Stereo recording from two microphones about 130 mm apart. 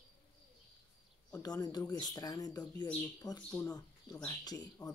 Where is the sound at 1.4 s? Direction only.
30° left (ahead or behind).